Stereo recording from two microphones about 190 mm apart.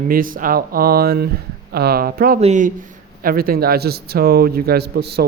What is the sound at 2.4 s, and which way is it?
Speech, 40° right (ahead or behind).